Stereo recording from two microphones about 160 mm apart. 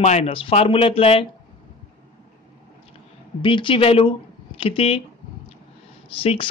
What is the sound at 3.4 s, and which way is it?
Speech, 30° left (ahead or behind).